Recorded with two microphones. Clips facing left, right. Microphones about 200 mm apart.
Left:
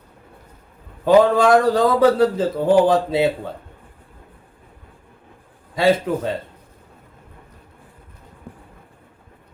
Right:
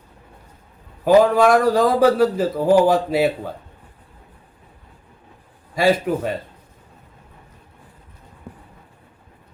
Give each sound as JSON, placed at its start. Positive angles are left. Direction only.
{"t": 1.0, "sound": "speech", "side_deg": 25}
{"t": 5.8, "sound": "speech", "side_deg": 25}